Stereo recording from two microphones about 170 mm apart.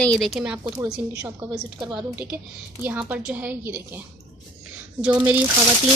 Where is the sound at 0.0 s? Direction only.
5° left (ahead or behind).